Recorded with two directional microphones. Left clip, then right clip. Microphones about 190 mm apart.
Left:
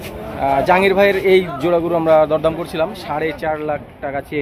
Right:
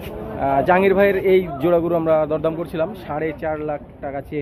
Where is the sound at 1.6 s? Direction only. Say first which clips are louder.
Left 2 dB; 10° left (ahead or behind).